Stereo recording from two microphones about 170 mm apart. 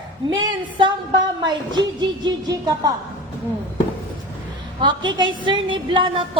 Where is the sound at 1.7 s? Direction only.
25° right (ahead or behind).